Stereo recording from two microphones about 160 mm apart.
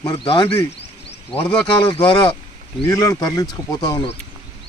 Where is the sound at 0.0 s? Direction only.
30° left (ahead or behind).